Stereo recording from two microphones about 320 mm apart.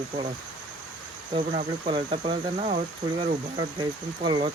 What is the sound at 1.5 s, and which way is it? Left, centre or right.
Speech, centre.